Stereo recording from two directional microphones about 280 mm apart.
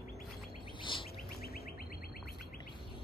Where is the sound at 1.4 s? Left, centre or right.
Left.